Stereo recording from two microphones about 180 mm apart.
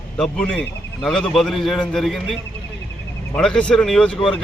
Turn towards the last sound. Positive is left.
turn(degrees=5)  # may be behind; listen again after turning